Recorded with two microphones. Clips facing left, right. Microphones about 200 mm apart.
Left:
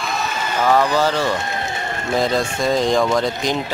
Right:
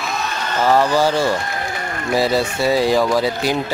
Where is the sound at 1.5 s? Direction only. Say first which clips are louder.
Even; 25° left (ahead or behind).